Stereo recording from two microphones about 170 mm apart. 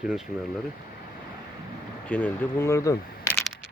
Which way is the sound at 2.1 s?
10° left (ahead or behind).